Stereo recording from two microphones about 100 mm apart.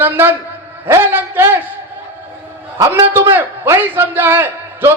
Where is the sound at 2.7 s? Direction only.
25° right (ahead or behind).